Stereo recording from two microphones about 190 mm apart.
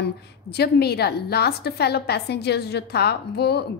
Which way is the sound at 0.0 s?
60° left (ahead or behind).